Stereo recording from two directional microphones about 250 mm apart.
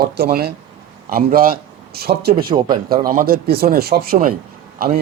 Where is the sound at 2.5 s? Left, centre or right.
Centre.